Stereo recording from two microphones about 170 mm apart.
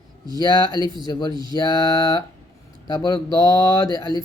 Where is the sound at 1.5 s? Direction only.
25° left (ahead or behind).